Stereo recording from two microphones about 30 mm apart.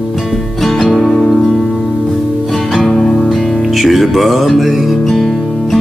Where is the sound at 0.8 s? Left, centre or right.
Left.